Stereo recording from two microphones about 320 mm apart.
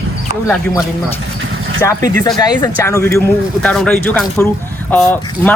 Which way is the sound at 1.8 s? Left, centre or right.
Centre.